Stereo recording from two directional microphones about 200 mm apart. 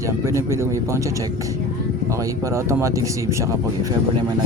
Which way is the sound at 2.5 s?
15° right (ahead or behind).